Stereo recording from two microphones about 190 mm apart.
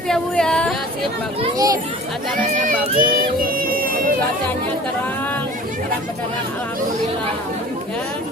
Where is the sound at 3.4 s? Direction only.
50° right (ahead or behind).